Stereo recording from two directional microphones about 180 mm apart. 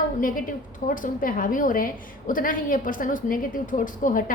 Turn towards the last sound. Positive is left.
turn(degrees=50)  # may be behind; listen again after turning